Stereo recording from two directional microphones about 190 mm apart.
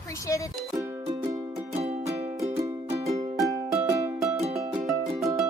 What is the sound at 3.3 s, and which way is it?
Music, 20° right (ahead or behind).